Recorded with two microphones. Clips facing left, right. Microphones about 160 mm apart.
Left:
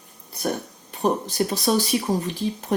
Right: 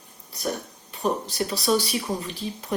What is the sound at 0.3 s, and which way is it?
Speech, 50° left (ahead or behind).